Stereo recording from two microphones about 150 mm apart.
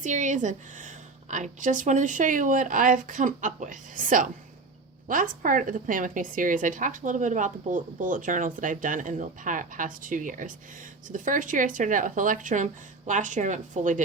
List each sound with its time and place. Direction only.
0.0 s a woman's voice: 55° right (ahead or behind)